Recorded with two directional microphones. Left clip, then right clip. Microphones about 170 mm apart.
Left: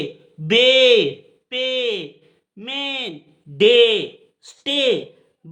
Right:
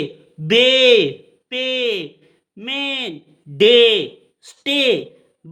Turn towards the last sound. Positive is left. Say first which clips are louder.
# right 2 dB
turn(degrees=-30)  # may be behind; listen again after turning